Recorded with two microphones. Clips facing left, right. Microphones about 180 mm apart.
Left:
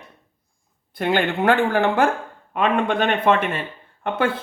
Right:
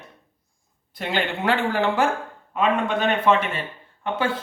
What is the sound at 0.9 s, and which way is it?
Speech, 50° left (ahead or behind).